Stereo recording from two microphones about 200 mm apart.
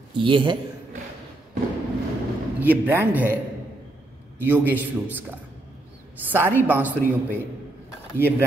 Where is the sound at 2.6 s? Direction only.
10° right (ahead or behind).